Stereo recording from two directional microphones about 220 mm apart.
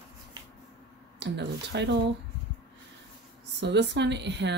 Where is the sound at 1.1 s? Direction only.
50° right (ahead or behind).